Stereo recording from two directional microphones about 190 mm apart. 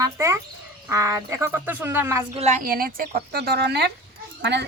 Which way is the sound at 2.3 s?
40° right (ahead or behind).